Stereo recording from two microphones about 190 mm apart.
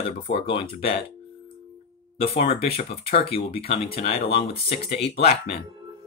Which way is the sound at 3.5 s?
30° left (ahead or behind).